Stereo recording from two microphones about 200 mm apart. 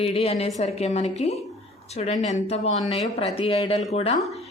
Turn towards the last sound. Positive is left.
turn(degrees=30)  # may be behind; listen again after turning